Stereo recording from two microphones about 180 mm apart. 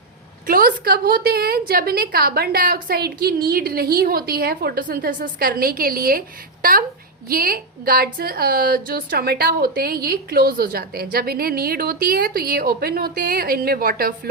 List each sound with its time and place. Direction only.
0.4 s a woman's voice: 55° right (ahead or behind)